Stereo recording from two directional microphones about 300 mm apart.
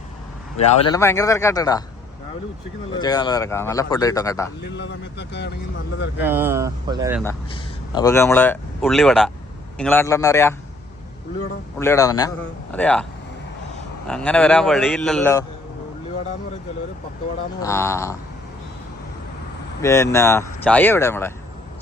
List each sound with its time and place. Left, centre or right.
0.5 s speech: left
0.9 s speech: centre
2.9 s speech: centre
4.6 s speech: left
6.1 s speech: centre
7.3 s speech: centre
11.8 s a man's voice: centre
14.1 s a man's voice: centre
17.6 s speech: centre
19.8 s speech: centre